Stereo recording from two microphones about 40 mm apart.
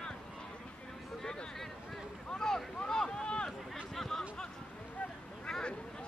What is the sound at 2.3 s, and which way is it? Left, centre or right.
Boat, centre.